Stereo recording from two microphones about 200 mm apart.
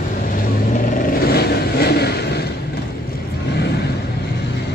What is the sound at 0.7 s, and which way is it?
Vehicle, 40° left (ahead or behind).